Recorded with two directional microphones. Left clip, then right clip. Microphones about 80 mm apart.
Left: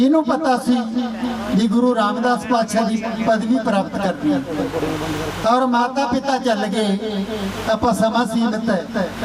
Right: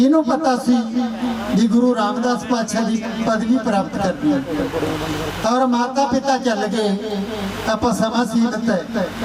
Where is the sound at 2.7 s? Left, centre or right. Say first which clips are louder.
Left 2 dB; right.